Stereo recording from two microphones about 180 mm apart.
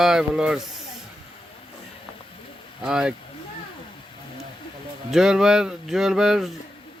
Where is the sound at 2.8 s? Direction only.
5° right (ahead or behind).